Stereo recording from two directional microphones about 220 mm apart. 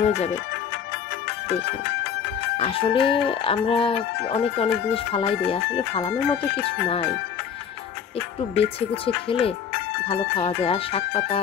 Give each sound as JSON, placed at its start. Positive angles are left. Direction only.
{"t": 0.0, "sound": "music", "side_deg": 30}
{"t": 2.5, "sound": "music", "side_deg": 25}
{"t": 8.5, "sound": "music", "side_deg": 25}